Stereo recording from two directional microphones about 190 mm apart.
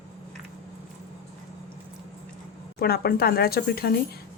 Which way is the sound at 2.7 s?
55° left (ahead or behind).